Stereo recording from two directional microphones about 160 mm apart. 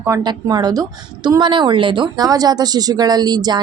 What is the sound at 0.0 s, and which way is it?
Speech, 20° right (ahead or behind).